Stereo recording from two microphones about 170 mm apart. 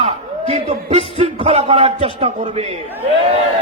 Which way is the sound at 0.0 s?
40° right (ahead or behind).